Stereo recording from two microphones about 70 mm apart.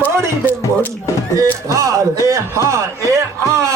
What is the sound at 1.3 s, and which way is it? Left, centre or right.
Music, right.